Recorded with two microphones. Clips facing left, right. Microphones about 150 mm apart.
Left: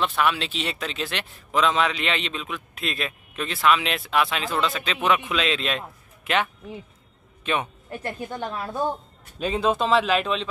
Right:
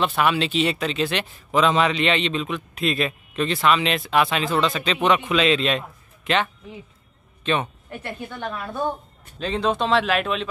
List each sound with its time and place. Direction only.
0.0 s speech: centre (ahead or behind)
7.9 s a woman's voice: 35° left (ahead or behind)
9.4 s speech: 5° left (ahead or behind)